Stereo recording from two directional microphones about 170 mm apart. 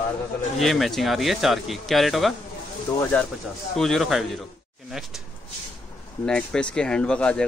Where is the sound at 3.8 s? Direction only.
Centre (ahead or behind).